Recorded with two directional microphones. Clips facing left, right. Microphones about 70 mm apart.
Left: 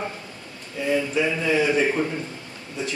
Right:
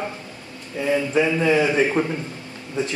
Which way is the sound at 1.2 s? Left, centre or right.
Right.